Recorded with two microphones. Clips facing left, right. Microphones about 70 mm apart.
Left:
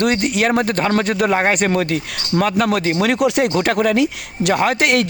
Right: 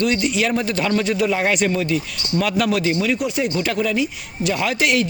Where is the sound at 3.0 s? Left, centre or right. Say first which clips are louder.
Left 5 dB; left.